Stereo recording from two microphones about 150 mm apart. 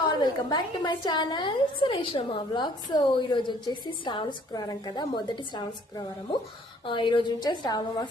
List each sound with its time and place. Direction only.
0.0 s a woman's voice: 30° left (ahead or behind)